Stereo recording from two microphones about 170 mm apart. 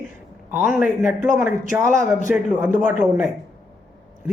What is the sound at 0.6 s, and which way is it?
Speech, 10° right (ahead or behind).